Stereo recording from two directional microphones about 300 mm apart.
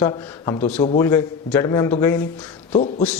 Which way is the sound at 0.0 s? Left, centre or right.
Centre.